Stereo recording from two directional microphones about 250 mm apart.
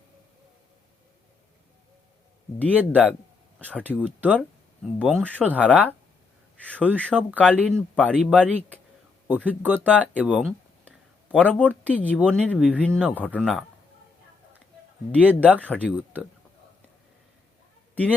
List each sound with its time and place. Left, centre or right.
2.7 s speech: centre
3.7 s speech: centre
4.9 s speech: centre
9.3 s speech: centre
9.7 s speech: centre
10.0 s speech: centre
15.1 s speech: centre